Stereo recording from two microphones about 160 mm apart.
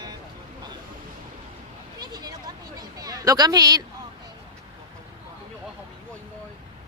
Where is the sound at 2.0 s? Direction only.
25° right (ahead or behind).